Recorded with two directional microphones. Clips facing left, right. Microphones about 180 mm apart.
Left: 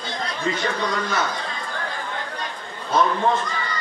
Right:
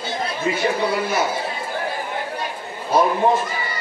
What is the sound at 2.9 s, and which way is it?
Speech, 15° right (ahead or behind).